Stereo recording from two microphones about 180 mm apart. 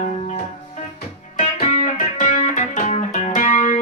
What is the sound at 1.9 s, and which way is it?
Music, 40° left (ahead or behind).